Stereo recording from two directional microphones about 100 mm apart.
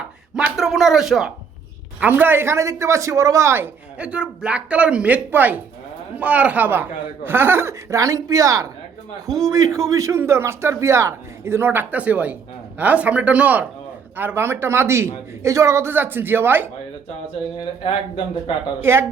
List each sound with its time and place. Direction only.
0.5 s speech: centre (ahead or behind)
2.0 s a man's voice: 20° right (ahead or behind)
3.9 s a woman's voice: 10° right (ahead or behind)
18.8 s a man's voice: 25° right (ahead or behind)